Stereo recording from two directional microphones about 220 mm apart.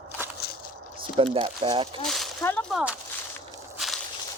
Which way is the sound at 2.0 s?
Centre (ahead or behind).